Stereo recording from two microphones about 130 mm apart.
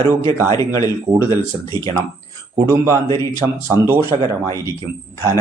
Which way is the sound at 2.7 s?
25° right (ahead or behind).